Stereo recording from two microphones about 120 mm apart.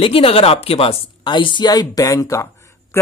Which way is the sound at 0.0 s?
50° left (ahead or behind).